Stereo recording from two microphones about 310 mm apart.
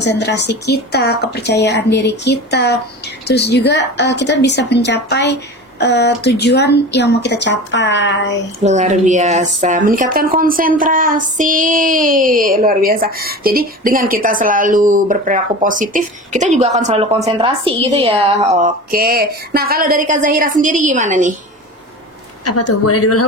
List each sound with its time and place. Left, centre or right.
0.0 s a woman's voice: left
8.6 s child singing: right
22.4 s speech: left